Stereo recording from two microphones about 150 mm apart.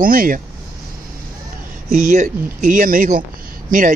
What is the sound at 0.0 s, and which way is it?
Speech, 70° right (ahead or behind).